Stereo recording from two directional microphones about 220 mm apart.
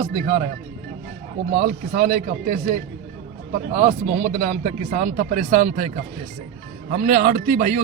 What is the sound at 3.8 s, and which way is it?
Speech, 30° right (ahead or behind).